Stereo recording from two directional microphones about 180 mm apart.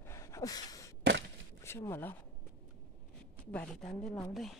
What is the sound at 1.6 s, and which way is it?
Speech, 15° left (ahead or behind).